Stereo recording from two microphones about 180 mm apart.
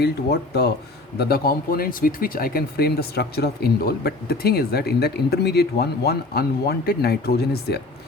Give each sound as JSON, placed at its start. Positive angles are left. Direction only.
{"t": 0.0, "sound": "speech", "side_deg": 65}